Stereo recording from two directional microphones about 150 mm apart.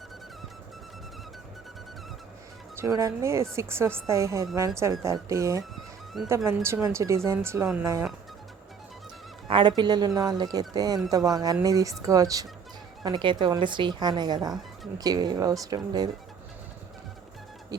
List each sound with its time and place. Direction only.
2.7 s speech: 20° right (ahead or behind)
9.5 s speech: 35° right (ahead or behind)
17.7 s music: 25° right (ahead or behind)